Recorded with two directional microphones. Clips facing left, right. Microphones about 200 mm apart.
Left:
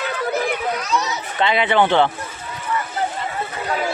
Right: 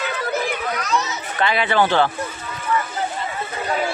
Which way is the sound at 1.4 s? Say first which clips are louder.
Left 2 dB; 20° left (ahead or behind).